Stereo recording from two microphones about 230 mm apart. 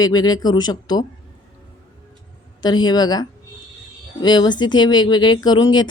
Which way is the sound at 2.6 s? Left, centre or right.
Centre.